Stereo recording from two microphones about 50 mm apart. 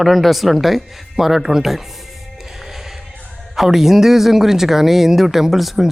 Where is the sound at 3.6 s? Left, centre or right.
Centre.